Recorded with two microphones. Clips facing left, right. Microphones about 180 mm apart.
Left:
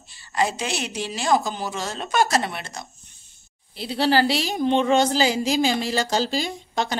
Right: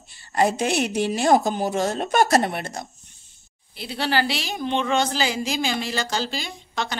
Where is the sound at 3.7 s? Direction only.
35° left (ahead or behind).